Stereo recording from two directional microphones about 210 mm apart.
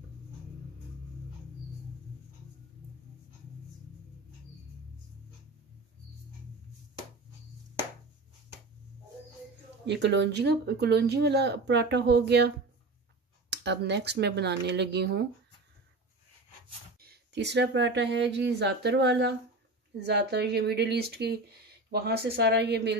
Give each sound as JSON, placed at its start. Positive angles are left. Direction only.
{"t": 9.8, "sound": "speech", "side_deg": -55}
{"t": 17.0, "sound": "speech", "side_deg": -50}